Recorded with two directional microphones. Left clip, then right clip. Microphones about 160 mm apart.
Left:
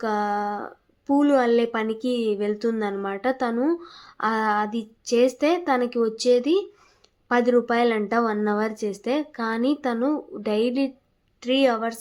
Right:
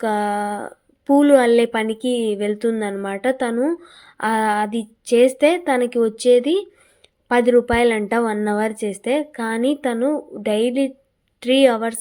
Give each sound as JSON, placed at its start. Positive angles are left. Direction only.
{"t": 0.0, "sound": "a woman's voice", "side_deg": -25}